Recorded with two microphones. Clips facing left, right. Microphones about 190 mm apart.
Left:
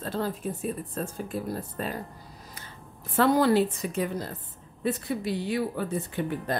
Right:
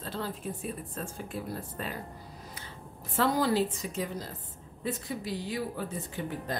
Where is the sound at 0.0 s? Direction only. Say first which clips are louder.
Left 6 dB; 45° left (ahead or behind).